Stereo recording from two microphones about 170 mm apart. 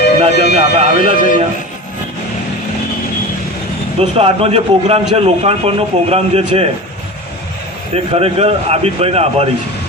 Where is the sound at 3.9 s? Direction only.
35° right (ahead or behind).